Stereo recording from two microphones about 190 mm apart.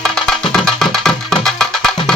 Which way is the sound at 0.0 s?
5° left (ahead or behind).